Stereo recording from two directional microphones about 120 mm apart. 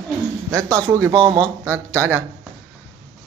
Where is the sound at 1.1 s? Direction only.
40° right (ahead or behind).